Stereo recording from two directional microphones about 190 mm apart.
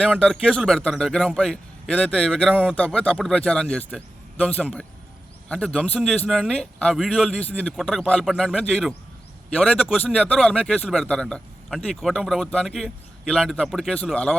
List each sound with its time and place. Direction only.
0.2 s speech: 5° left (ahead or behind)